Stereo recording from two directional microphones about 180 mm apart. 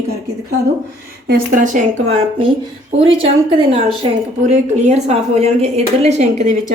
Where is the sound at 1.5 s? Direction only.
45° right (ahead or behind).